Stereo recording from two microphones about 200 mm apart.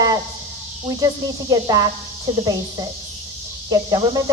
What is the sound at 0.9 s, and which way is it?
A woman's voice, 20° right (ahead or behind).